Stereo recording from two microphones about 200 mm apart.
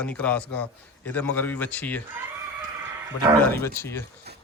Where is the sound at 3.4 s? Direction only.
10° left (ahead or behind).